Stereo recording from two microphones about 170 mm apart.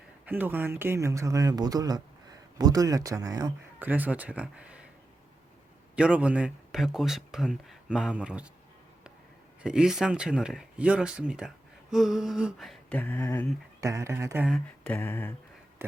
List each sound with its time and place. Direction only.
0.3 s speech: 10° right (ahead or behind)
3.8 s speech: 10° right (ahead or behind)
6.0 s speech: 5° right (ahead or behind)
9.6 s speech: 5° right (ahead or behind); by 13.5 s 10° left (ahead or behind)
13.8 s speech: 15° right (ahead or behind)
14.8 s a sound: 10° left (ahead or behind)